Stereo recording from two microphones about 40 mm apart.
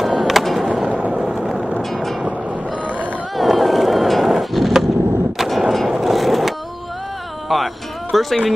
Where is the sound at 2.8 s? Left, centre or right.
Right.